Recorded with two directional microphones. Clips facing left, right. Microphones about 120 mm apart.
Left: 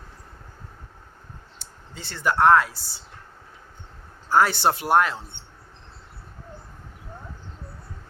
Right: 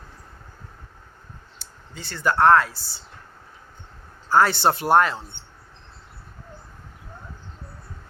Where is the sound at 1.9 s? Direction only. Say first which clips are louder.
Right 2 dB; 25° left (ahead or behind).